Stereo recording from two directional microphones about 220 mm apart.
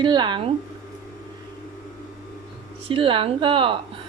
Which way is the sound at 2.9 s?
25° right (ahead or behind).